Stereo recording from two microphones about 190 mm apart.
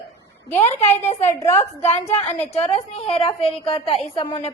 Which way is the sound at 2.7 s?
30° left (ahead or behind).